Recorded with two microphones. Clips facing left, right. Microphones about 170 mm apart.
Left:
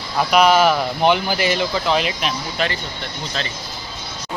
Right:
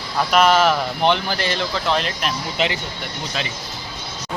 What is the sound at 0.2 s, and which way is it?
Speech, centre (ahead or behind).